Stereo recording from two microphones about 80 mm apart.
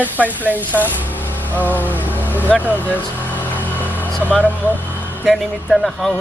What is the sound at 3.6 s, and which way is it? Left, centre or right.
Vehicle, left.